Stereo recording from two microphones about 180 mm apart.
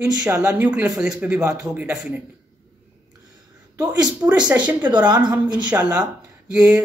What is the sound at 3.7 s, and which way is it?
Speech, 20° right (ahead or behind).